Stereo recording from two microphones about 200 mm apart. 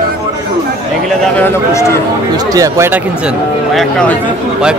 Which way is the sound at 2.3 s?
15° right (ahead or behind).